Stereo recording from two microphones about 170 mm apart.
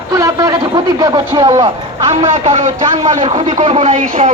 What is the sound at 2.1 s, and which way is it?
Speech, 45° right (ahead or behind).